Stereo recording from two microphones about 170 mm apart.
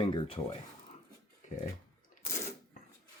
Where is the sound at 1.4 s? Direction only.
45° left (ahead or behind).